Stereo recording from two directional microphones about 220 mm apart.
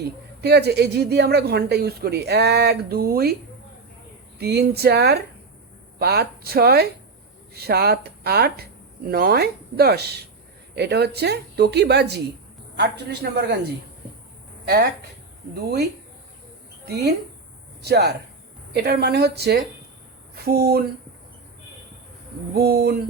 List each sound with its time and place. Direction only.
0.4 s speech: 50° right (ahead or behind)
4.4 s speech: 45° right (ahead or behind)
15.5 s a woman's voice: 45° right (ahead or behind)
22.5 s speech: 45° right (ahead or behind)